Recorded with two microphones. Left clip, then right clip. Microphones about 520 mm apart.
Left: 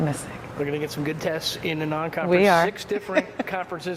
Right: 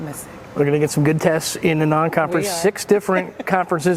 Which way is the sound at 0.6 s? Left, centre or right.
Right.